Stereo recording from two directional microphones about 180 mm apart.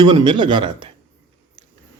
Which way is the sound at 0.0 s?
25° right (ahead or behind).